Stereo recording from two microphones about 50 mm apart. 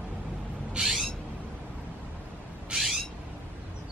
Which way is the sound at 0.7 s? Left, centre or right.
Centre.